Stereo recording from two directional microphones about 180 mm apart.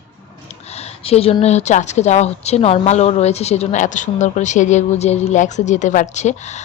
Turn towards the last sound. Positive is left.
turn(degrees=40)  # may be behind; listen again after turning